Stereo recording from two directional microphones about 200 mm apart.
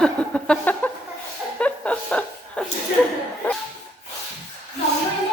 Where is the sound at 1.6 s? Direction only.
5° left (ahead or behind).